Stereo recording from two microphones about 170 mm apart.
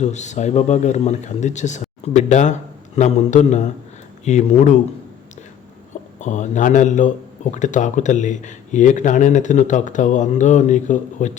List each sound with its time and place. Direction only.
0.0 s speech: 45° left (ahead or behind)
5.9 s speech: 45° left (ahead or behind)